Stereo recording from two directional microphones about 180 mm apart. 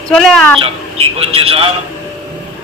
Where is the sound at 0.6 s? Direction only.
35° right (ahead or behind).